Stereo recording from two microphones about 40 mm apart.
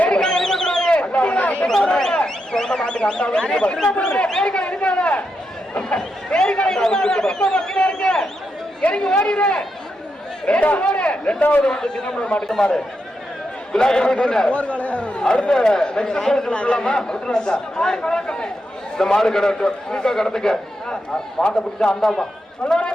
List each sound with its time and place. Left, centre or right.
0.1 s a sound: centre
1.0 s a sound: left
1.6 s a sound: centre
4.0 s speech: left
6.3 s a man's voice: left
10.4 s a man's voice: left
11.6 s speech: centre
12.4 s a man's voice: centre
13.7 s a man's voice: centre
14.5 s speech: left
15.2 s speech: left
16.5 s a man's voice: left; by 22.3 s centre
22.6 s speech: left